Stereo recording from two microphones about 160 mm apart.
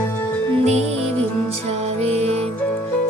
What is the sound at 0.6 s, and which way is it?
Music, 45° right (ahead or behind).